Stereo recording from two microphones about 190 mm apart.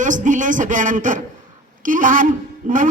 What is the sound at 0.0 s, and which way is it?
A man's voice, 40° right (ahead or behind).